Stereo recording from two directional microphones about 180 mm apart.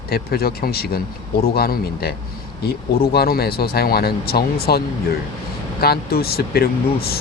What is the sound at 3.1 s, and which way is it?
Speech, 60° left (ahead or behind).